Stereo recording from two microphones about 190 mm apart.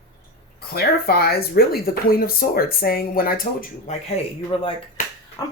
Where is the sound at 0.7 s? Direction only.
55° left (ahead or behind).